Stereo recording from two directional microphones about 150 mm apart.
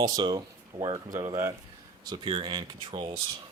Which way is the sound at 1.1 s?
15° right (ahead or behind).